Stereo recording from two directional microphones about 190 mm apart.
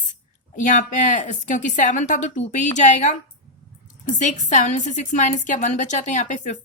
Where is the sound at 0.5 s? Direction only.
40° left (ahead or behind).